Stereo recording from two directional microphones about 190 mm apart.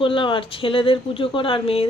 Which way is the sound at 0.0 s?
25° left (ahead or behind).